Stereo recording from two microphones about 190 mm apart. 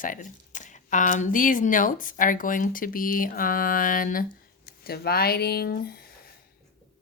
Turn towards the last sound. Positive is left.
turn(degrees=55)  # may be behind; listen again after turning